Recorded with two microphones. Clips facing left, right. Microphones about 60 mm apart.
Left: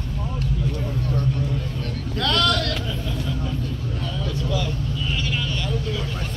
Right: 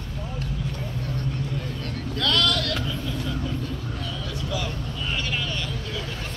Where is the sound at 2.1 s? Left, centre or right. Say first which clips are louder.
Left 3 dB; centre.